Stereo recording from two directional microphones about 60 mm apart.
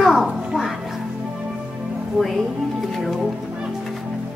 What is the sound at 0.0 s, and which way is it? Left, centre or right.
Music, centre.